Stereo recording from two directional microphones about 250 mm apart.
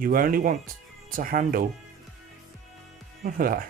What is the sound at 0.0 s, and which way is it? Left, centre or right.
Speech, right.